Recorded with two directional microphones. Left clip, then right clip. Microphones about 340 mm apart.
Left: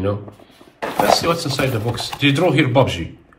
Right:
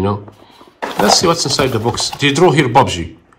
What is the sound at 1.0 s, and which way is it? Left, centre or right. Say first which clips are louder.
Speech: right 5 dB; centre.